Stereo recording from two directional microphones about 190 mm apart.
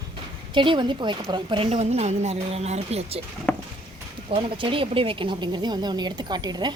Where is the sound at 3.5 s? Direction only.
10° left (ahead or behind).